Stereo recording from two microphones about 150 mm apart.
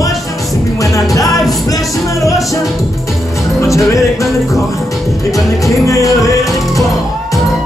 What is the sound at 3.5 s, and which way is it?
Music, 20° left (ahead or behind).